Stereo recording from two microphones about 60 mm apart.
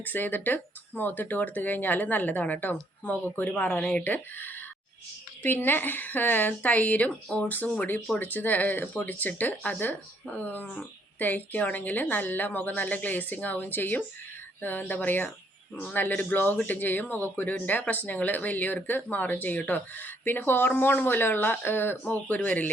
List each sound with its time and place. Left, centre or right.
0.0 s a woman's voice: left